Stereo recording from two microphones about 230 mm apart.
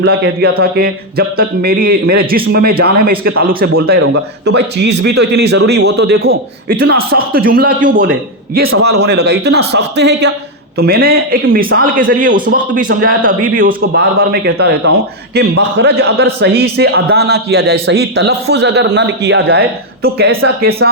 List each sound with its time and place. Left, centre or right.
0.0 s a man's voice: right
13.8 s a man's voice: right